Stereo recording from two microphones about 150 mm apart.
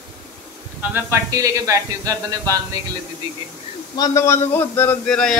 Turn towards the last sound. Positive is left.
turn(degrees=5)  # may be behind; listen again after turning